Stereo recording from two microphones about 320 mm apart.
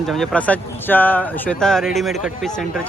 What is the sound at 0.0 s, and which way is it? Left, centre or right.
Speech, centre.